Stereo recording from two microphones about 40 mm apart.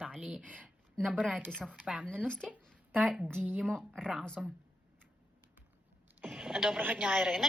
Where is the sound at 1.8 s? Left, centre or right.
Right.